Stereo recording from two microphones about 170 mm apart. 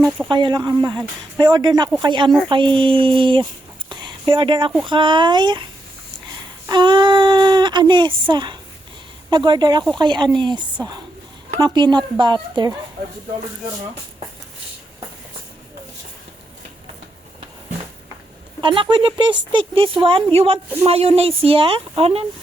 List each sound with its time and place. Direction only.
0.3 s a woman's voice: 25° right (ahead or behind)
3.8 s a sound: 25° right (ahead or behind)
4.9 s a woman's voice: 30° right (ahead or behind)
6.7 s a woman's voice: 25° right (ahead or behind)
18.6 s a woman's voice: 30° right (ahead or behind)